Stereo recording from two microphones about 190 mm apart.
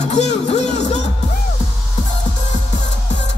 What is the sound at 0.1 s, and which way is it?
Music, 35° left (ahead or behind).